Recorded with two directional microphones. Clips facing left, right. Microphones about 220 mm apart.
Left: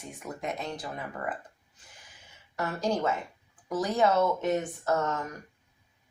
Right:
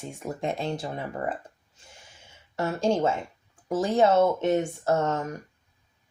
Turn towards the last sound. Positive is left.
turn(degrees=-25)  # may be behind; listen again after turning